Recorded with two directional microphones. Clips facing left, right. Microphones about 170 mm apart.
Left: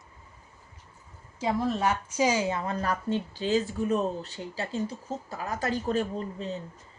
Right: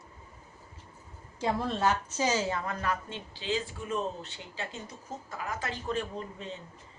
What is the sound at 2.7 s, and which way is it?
Speech, 35° left (ahead or behind).